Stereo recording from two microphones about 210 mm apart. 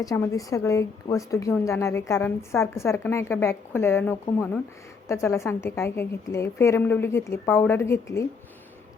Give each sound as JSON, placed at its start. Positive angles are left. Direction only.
{"t": 0.0, "sound": "a woman's voice", "side_deg": 15}